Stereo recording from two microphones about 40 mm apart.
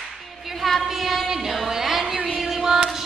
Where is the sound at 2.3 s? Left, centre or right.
Centre.